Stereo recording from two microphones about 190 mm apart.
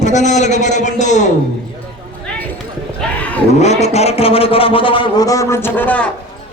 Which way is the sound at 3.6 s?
35° left (ahead or behind).